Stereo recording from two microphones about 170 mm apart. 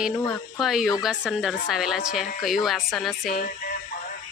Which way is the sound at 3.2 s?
55° left (ahead or behind).